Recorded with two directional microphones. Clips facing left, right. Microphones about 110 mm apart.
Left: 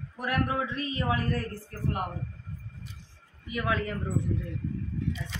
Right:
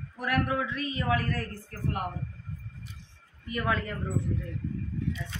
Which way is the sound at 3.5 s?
10° left (ahead or behind).